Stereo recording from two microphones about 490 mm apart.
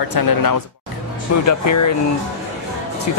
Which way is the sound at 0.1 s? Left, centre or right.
Left.